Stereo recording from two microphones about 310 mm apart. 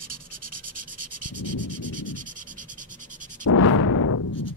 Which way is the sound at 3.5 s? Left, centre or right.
Left.